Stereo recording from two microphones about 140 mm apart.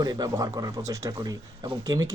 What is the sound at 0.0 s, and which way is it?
Speech, 25° right (ahead or behind).